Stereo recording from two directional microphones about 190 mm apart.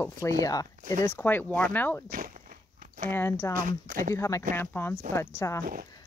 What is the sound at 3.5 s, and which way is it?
Speech, 45° right (ahead or behind).